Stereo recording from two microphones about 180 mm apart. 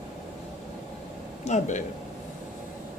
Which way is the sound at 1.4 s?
40° left (ahead or behind).